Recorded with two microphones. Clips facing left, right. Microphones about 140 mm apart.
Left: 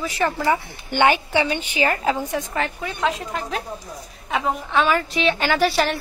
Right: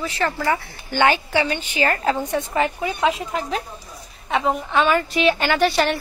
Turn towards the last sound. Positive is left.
turn(degrees=0)  # may be behind; listen again after turning